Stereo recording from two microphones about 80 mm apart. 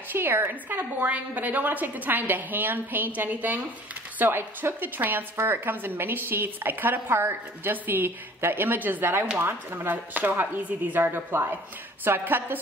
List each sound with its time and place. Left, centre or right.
0.1 s a woman's voice: right